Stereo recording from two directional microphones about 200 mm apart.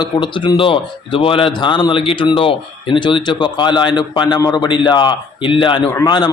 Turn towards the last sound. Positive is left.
turn(degrees=20)  # may be behind; listen again after turning